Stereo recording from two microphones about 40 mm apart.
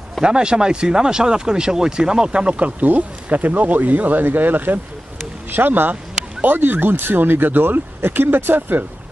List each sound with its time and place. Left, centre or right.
0.2 s speech: right
8.5 s speech: right